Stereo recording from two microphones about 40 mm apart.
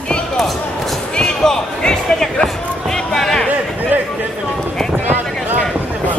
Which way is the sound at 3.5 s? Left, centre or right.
Right.